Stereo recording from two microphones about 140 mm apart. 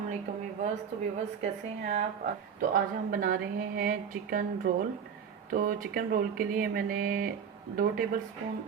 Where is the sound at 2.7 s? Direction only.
90° right.